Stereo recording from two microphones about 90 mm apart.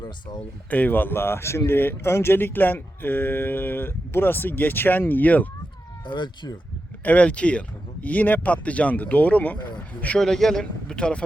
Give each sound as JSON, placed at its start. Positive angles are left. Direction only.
{"t": 0.7, "sound": "speech", "side_deg": 20}
{"t": 6.1, "sound": "speech", "side_deg": 60}
{"t": 7.0, "sound": "speech", "side_deg": 15}
{"t": 10.2, "sound": "speech", "side_deg": 5}